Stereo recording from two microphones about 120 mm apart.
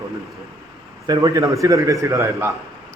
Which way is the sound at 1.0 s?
35° right (ahead or behind).